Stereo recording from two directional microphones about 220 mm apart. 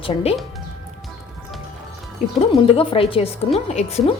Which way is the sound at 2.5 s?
25° left (ahead or behind).